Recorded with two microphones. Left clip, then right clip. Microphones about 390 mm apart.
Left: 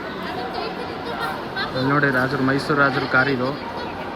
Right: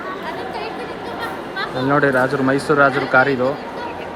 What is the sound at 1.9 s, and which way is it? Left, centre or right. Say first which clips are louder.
Speech: right 4 dB; right.